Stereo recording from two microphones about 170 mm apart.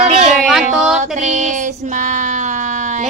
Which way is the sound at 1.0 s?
45° right (ahead or behind).